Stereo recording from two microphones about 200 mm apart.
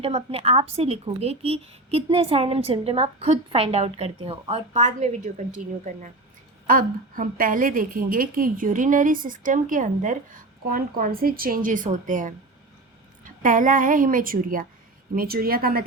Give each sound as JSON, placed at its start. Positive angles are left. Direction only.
{"t": 0.0, "sound": "a woman's voice", "side_deg": -30}
{"t": 6.7, "sound": "a woman's voice", "side_deg": -45}